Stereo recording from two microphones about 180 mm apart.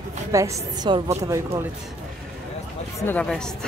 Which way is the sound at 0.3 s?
15° right (ahead or behind).